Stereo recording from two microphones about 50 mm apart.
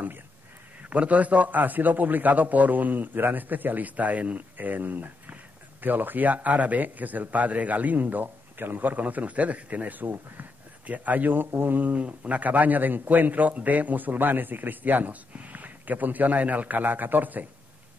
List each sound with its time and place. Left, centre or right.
0.8 s a man's voice: right